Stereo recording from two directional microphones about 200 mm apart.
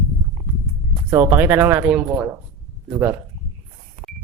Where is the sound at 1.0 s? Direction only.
10° right (ahead or behind).